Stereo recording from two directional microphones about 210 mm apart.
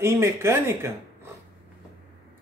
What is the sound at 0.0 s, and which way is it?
Speech, 10° right (ahead or behind).